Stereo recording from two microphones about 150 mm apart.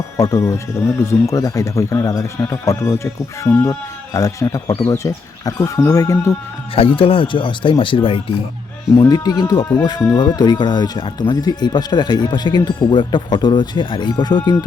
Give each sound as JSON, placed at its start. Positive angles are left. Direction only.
{"t": 0.2, "sound": "speech", "side_deg": 20}
{"t": 6.7, "sound": "speech", "side_deg": 35}
{"t": 9.0, "sound": "speech", "side_deg": 25}
{"t": 9.6, "sound": "speech", "side_deg": 15}
{"t": 10.2, "sound": "speech", "side_deg": 30}